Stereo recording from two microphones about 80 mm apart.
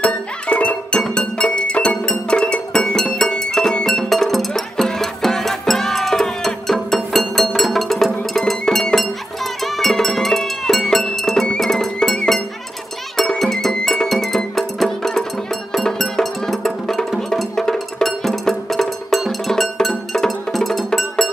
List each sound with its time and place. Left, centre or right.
0.0 s music: centre